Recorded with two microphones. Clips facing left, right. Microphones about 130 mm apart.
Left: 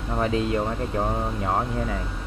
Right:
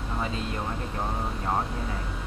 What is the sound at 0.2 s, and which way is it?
Speech, 75° left (ahead or behind).